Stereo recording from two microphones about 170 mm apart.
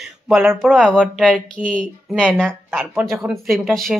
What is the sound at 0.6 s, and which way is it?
A woman's voice, centre (ahead or behind).